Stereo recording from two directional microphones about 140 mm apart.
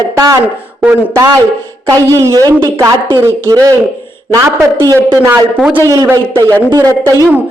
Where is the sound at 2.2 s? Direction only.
25° right (ahead or behind).